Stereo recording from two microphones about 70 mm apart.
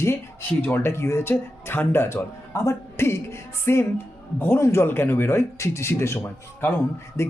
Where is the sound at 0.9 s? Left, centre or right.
Left.